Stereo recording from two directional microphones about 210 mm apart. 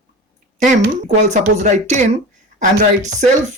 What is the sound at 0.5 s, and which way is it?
Speech, 35° right (ahead or behind).